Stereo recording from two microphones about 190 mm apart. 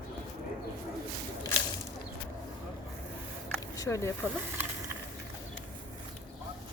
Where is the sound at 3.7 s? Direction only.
15° left (ahead or behind).